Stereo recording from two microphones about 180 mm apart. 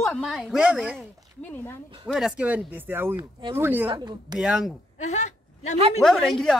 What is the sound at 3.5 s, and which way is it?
Speech, 10° right (ahead or behind).